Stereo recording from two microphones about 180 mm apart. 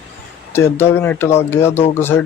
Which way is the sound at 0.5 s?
15° left (ahead or behind).